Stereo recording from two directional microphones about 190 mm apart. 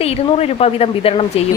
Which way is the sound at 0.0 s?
30° left (ahead or behind).